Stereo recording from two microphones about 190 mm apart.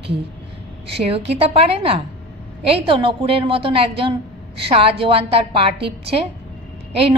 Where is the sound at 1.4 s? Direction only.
30° right (ahead or behind).